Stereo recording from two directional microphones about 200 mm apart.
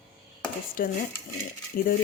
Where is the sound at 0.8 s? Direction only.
45° left (ahead or behind).